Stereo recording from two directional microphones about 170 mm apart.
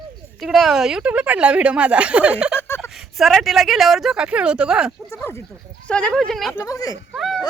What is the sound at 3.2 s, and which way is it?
Speech, centre (ahead or behind).